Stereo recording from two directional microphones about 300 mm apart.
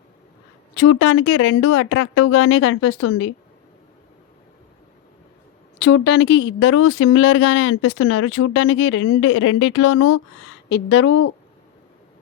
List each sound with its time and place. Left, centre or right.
0.7 s speech: left
5.8 s speech: left